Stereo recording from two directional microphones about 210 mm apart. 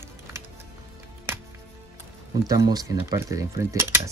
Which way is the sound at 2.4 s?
20° right (ahead or behind).